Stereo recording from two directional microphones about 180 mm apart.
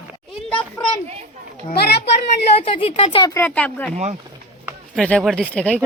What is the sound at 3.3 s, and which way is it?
Speech, 10° left (ahead or behind).